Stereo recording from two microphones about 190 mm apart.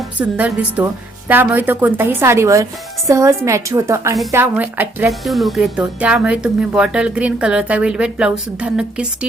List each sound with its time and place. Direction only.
0.2 s a woman's voice: 10° right (ahead or behind)